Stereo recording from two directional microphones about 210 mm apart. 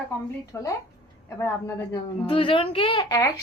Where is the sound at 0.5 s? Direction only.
15° left (ahead or behind).